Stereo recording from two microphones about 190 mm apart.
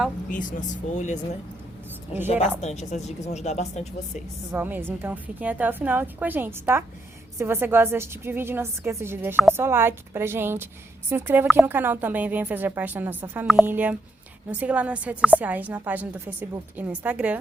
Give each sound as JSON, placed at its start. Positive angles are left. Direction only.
{"t": 0.3, "sound": "speech", "side_deg": 45}
{"t": 2.2, "sound": "speech", "side_deg": 35}
{"t": 4.5, "sound": "a woman's voice", "side_deg": -10}